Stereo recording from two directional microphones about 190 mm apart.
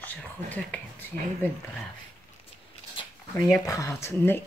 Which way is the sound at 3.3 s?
15° left (ahead or behind).